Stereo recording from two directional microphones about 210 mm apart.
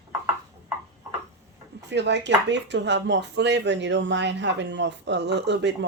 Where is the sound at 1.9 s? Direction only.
55° right (ahead or behind).